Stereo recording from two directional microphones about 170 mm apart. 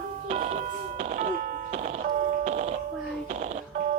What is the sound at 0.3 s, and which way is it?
Music, 40° right (ahead or behind).